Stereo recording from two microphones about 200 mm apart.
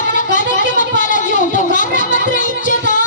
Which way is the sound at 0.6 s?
40° left (ahead or behind).